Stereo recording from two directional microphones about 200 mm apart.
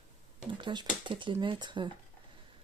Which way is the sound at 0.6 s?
25° right (ahead or behind).